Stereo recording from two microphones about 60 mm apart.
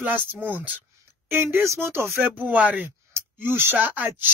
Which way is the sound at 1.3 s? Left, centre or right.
Right.